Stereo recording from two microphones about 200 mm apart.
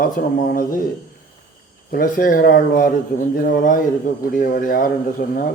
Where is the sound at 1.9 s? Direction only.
45° left (ahead or behind).